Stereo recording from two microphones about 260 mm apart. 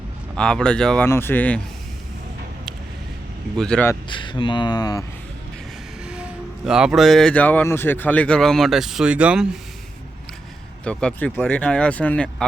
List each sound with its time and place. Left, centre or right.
0.3 s speech: centre
3.6 s speech: centre
4.1 s speech: centre
6.1 s speech: centre
10.8 s speech: centre